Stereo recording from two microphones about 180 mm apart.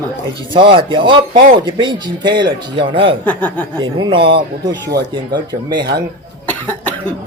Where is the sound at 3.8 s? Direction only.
25° right (ahead or behind).